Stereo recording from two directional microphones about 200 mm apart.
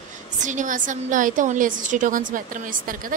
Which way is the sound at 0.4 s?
40° right (ahead or behind).